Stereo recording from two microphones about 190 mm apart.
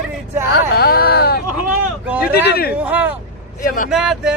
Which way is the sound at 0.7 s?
55° left (ahead or behind).